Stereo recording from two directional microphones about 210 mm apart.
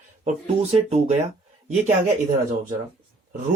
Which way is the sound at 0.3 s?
30° right (ahead or behind).